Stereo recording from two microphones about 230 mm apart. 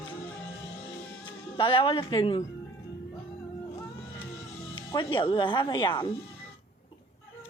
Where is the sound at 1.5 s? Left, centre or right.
Left.